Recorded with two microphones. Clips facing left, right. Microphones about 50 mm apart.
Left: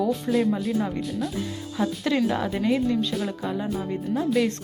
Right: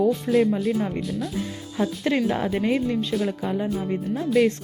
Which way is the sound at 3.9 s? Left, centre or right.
Centre.